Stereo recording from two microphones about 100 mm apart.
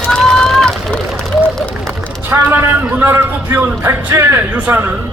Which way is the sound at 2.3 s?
20° right (ahead or behind).